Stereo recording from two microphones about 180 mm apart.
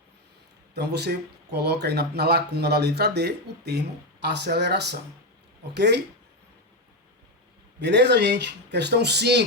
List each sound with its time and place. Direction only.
0.7 s speech: 65° right (ahead or behind)
7.8 s speech: 70° right (ahead or behind)